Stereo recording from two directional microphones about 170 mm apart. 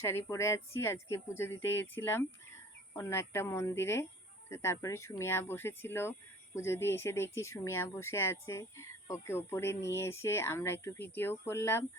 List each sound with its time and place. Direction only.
0.0 s speech: 15° left (ahead or behind)